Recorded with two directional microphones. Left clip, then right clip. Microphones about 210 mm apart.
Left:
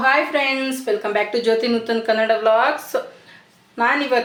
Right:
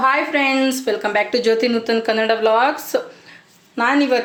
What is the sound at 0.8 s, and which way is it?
A woman's voice, 40° right (ahead or behind).